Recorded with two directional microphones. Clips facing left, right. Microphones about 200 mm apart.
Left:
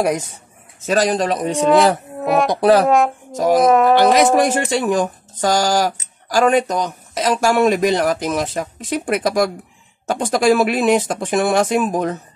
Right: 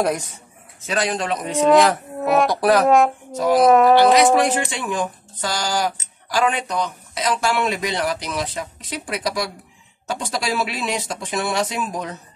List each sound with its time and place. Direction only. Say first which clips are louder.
0.0 s speech: left 3 dB; 20° left (ahead or behind)
0.8 s a man's voice: left 6 dB; 40° left (ahead or behind)
2.1 s speech: left 1 dB; centre (ahead or behind)
2.5 s speech: left 3 dB; 25° left (ahead or behind)
3.3 s speech: left 2 dB; 45° left (ahead or behind)
3.6 s speech: right 1 dB; centre (ahead or behind)
4.6 s speech: left 6 dB; 40° left (ahead or behind)